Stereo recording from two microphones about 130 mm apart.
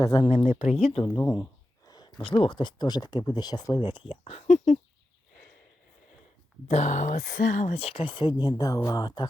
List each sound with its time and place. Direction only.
0.0 s speech: 35° left (ahead or behind)
0.3 s speech: 50° left (ahead or behind)
1.1 s speech: 15° left (ahead or behind)
1.9 s a sound: 30° left (ahead or behind)
2.2 s speech: 40° left (ahead or behind); by 4.8 s 65° left (ahead or behind)
6.7 s speech: 65° left (ahead or behind); by 9.2 s 35° left (ahead or behind)